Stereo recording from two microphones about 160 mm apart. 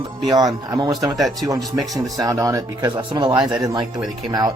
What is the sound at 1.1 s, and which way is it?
Speech, centre (ahead or behind).